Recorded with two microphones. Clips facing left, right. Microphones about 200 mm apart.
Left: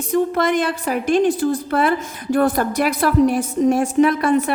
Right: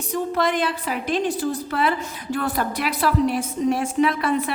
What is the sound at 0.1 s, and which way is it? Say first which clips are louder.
A woman's voice: left 5 dB; 50° left (ahead or behind).